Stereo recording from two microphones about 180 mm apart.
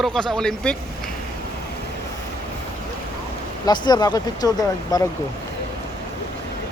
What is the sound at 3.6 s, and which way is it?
Speech, 25° left (ahead or behind).